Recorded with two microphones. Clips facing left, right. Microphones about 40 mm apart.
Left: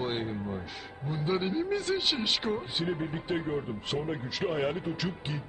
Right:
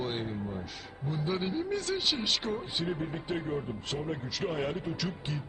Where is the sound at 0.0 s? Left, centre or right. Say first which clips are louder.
Left 2 dB; centre.